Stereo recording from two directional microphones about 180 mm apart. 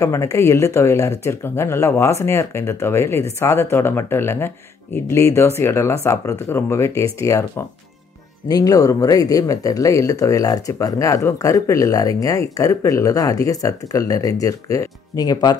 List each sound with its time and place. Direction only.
0.0 s speech: 15° left (ahead or behind)